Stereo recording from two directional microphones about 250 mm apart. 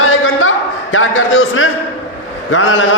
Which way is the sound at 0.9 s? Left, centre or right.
Left.